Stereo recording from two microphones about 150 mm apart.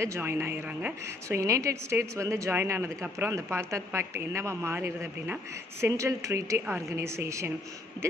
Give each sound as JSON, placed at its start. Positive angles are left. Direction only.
{"t": 0.0, "sound": "a woman's voice", "side_deg": -15}